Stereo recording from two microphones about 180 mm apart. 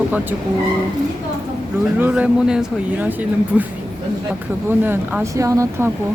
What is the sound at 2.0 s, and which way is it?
Speech, 10° right (ahead or behind).